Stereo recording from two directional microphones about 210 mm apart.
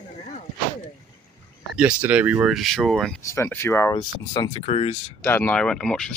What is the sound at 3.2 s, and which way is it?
Speech, 10° left (ahead or behind).